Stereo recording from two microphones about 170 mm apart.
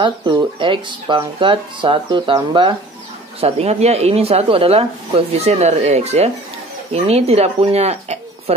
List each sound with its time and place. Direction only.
0.0 s speech: 25° right (ahead or behind)